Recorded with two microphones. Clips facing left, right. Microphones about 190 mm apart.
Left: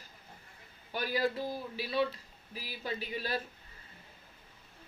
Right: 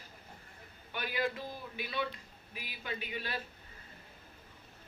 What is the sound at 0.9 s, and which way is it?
Speech, 35° left (ahead or behind).